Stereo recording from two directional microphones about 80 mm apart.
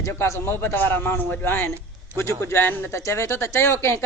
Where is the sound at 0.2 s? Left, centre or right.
Left.